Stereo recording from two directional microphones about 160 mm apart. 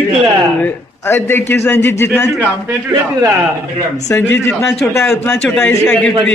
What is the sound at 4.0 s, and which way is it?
Speech, 15° left (ahead or behind).